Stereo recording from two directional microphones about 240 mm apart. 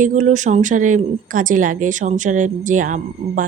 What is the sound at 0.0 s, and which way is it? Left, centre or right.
A woman's voice, right.